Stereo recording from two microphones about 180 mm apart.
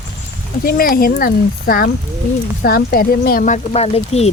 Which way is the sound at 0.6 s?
55° left (ahead or behind).